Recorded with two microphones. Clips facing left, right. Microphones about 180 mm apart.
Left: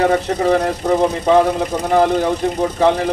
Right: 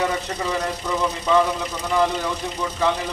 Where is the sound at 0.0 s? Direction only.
65° left (ahead or behind).